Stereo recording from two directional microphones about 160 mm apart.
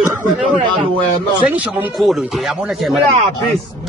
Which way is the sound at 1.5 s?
10° right (ahead or behind).